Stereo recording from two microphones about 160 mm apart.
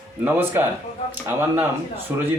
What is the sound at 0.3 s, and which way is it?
Speech, 15° right (ahead or behind).